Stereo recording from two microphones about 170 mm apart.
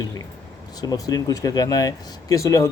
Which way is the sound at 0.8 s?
20° left (ahead or behind).